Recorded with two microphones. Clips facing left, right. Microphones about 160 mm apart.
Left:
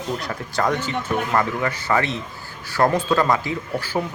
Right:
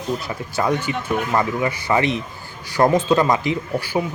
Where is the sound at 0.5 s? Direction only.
10° right (ahead or behind).